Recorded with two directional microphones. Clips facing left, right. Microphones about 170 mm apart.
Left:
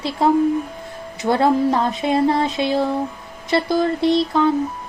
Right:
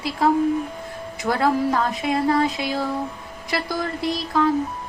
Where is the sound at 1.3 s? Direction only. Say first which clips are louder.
Left 4 dB; 25° left (ahead or behind).